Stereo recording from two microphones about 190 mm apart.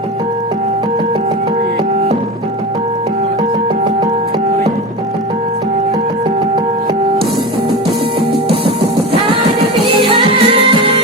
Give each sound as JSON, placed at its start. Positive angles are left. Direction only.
{"t": 9.8, "sound": "music", "side_deg": -25}